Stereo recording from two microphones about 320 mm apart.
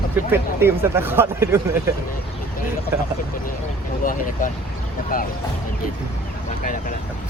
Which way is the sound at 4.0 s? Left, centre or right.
Left.